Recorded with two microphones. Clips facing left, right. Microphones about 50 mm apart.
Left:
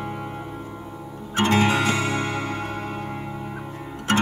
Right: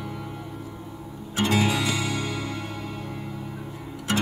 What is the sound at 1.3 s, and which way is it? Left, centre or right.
Music, left.